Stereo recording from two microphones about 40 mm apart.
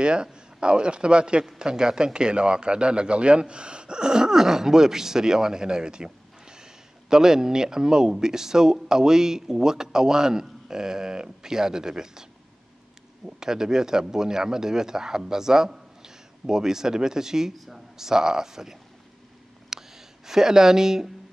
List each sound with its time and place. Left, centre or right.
0.0 s a man's voice: right
13.4 s a man's voice: centre
19.7 s a sound: centre